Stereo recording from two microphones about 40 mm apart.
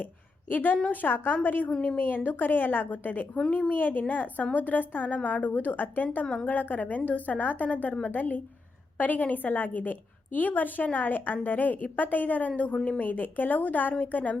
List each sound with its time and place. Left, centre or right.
0.5 s a woman's voice: left
13.0 s a woman's voice: left